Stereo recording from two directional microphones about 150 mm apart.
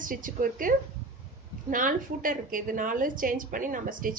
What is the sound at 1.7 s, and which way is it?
A woman's voice, 65° right (ahead or behind).